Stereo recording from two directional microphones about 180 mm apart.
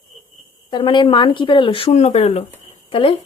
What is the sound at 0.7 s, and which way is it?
Speech, 25° left (ahead or behind).